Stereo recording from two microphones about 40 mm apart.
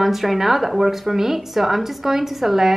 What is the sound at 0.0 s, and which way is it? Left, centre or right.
A woman's voice, centre.